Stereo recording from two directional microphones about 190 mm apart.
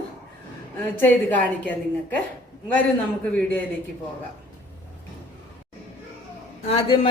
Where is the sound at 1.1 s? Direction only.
10° left (ahead or behind).